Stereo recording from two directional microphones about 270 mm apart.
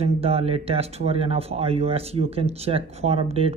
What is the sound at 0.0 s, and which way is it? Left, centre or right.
Speech, right.